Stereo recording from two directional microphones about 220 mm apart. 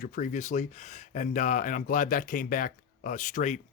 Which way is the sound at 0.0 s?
35° left (ahead or behind).